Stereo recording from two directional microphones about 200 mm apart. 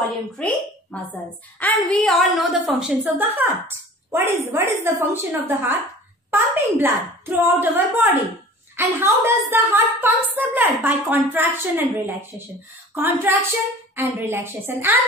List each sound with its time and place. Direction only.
0.4 s a woman's voice: 5° left (ahead or behind); by 15.0 s 10° right (ahead or behind)